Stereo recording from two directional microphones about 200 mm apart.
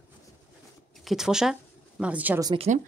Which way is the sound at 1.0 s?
Centre (ahead or behind).